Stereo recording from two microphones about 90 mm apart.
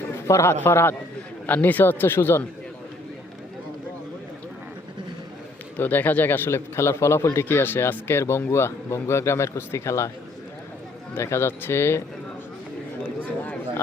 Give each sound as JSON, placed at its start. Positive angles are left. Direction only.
{"t": 0.3, "sound": "speech", "side_deg": 30}
{"t": 5.7, "sound": "speech", "side_deg": 20}
{"t": 11.1, "sound": "speech", "side_deg": 30}
{"t": 13.0, "sound": "a sound", "side_deg": 20}